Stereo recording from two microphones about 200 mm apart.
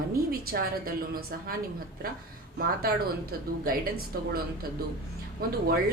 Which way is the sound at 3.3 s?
50° right (ahead or behind).